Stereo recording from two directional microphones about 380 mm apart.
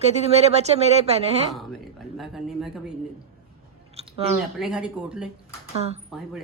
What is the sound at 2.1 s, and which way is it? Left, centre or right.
Speech, centre.